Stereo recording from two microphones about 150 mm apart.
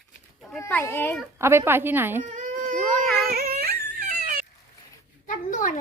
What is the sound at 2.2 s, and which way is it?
Baby cry, 55° right (ahead or behind).